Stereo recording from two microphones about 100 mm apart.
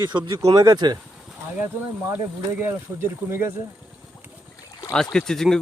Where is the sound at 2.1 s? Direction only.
20° right (ahead or behind).